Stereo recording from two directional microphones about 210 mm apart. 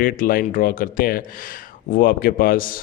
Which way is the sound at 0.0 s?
40° left (ahead or behind).